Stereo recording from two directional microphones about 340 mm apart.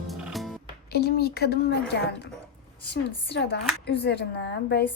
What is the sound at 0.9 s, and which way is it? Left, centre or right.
A woman's voice, left.